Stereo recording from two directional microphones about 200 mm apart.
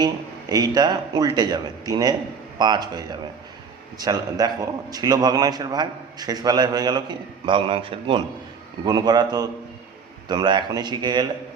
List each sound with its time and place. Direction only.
0.0 s a man's voice: 20° right (ahead or behind)